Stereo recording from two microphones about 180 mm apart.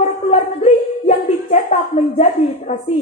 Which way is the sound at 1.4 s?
35° left (ahead or behind).